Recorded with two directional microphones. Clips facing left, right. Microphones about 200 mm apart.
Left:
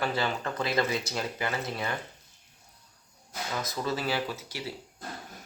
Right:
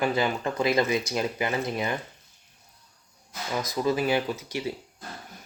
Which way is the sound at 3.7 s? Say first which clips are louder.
Right 7 dB; 15° right (ahead or behind).